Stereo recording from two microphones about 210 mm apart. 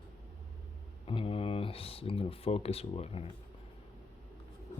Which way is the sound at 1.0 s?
25° left (ahead or behind).